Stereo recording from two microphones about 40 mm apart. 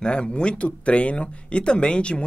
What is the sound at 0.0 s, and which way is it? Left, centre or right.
Speech, left.